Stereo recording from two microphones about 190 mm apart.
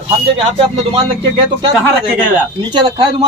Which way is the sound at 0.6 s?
30° right (ahead or behind).